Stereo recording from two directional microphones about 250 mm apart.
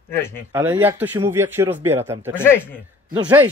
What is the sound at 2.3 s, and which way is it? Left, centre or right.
Speech, centre.